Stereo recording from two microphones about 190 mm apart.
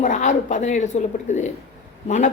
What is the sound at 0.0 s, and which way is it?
Speech, 40° left (ahead or behind).